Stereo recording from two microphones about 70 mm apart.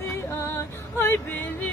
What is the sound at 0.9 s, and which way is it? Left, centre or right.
Female singing, left.